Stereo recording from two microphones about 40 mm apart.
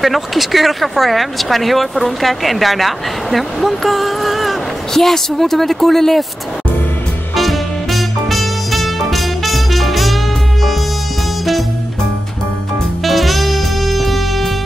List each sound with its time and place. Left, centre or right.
0.0 s speech: centre
7.3 s music: centre
13.0 s music: centre